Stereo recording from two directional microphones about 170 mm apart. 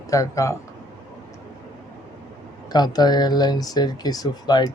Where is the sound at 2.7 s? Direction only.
25° left (ahead or behind).